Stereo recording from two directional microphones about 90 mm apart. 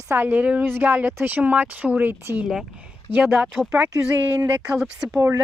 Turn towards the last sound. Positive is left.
turn(degrees=-5)  # may be behind; listen again after turning